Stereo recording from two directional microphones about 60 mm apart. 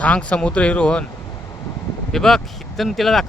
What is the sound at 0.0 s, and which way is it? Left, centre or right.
Speech, centre.